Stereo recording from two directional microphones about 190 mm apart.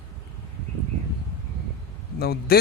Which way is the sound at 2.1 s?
55° left (ahead or behind).